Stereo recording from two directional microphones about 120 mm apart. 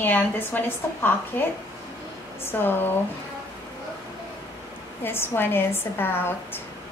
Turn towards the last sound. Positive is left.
turn(degrees=20)  # may be behind; listen again after turning